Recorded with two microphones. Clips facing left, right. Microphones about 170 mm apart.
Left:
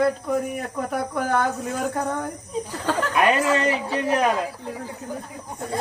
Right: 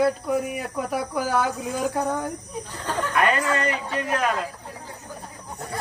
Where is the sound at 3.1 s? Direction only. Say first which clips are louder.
Left 2 dB; 20° left (ahead or behind).